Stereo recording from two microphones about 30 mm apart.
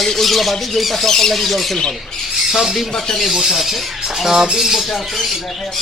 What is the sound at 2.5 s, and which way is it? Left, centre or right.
Speech, centre.